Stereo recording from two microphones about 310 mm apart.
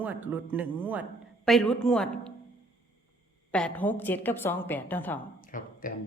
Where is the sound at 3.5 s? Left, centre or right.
Centre.